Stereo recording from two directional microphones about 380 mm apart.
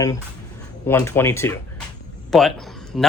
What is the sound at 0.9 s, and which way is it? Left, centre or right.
Speech, centre.